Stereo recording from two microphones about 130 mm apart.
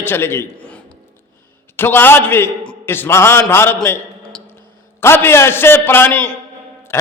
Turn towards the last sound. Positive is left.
turn(degrees=20)  # may be behind; listen again after turning